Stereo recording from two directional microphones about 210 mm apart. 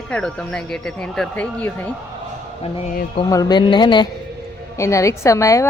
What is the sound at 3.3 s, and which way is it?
A woman's voice, 20° left (ahead or behind).